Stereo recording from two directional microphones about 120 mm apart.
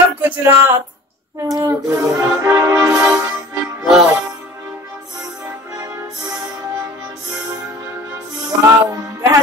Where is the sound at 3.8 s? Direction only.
10° right (ahead or behind).